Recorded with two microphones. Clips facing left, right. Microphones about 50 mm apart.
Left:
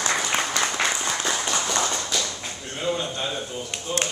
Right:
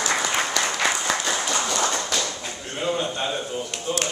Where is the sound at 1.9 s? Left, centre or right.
Right.